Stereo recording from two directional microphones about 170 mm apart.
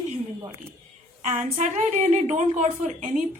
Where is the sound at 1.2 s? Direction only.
50° right (ahead or behind).